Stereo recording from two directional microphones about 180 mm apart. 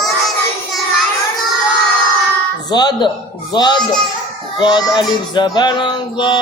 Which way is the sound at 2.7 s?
25° left (ahead or behind).